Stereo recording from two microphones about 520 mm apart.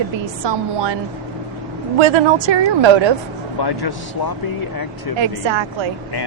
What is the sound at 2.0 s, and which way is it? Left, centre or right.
A woman's voice, right.